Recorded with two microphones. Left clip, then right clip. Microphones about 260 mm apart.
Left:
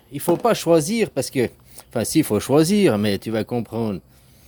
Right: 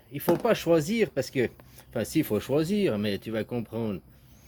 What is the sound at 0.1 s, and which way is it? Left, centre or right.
Speech, centre.